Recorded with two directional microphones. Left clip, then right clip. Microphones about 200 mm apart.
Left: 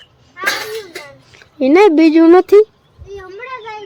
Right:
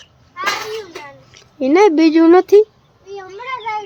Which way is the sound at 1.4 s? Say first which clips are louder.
Left 2 dB; 15° left (ahead or behind).